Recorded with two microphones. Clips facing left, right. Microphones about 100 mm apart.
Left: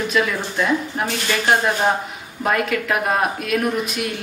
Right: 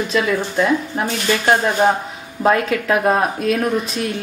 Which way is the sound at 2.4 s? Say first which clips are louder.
Right 4 dB; 35° right (ahead or behind).